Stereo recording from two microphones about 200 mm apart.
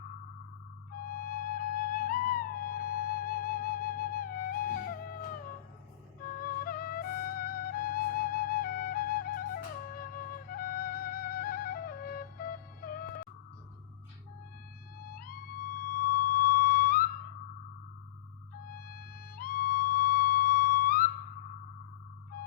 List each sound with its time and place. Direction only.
1.0 s music: 45° left (ahead or behind)
6.4 s music: 45° left (ahead or behind)
14.9 s music: 45° left (ahead or behind)
18.7 s music: 45° left (ahead or behind)